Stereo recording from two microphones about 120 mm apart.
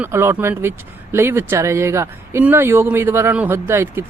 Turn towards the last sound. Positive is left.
turn(degrees=-20)  # may be behind; listen again after turning